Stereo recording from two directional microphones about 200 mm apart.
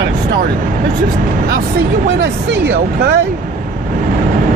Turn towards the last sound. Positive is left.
turn(degrees=-55)  # may be behind; listen again after turning